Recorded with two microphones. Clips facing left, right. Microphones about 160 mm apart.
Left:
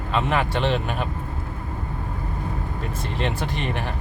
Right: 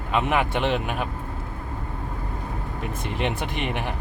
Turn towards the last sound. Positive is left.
turn(degrees=-15)  # may be behind; listen again after turning